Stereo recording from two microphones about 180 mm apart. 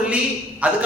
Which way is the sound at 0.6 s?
5° right (ahead or behind).